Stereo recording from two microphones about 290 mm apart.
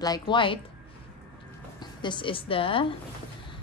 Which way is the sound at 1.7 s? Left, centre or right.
Centre.